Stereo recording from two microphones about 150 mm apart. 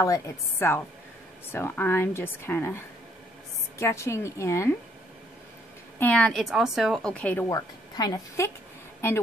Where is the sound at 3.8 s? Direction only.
20° left (ahead or behind).